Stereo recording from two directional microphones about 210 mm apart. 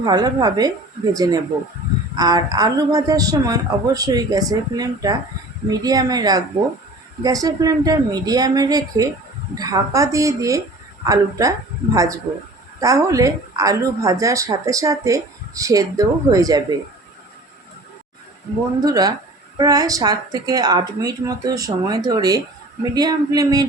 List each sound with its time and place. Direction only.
0.0 s a woman's voice: 20° right (ahead or behind)
18.9 s speech: 15° right (ahead or behind)